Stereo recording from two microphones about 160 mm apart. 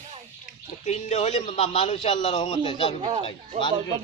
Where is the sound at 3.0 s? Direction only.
35° right (ahead or behind).